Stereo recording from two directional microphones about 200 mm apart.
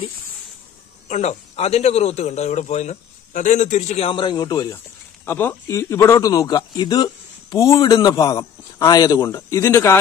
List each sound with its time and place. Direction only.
1.0 s a man's voice: 35° left (ahead or behind); by 9.9 s 10° left (ahead or behind)